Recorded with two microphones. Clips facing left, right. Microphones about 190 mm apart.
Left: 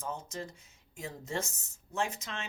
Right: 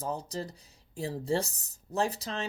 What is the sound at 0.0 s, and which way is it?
Speech, 35° right (ahead or behind).